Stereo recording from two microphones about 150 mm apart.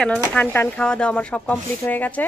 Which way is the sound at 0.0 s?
10° left (ahead or behind).